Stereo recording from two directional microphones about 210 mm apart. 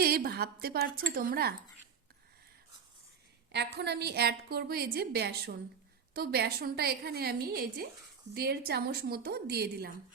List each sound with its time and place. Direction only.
0.0 s a woman's voice: 45° right (ahead or behind)
3.5 s a woman's voice: 50° right (ahead or behind)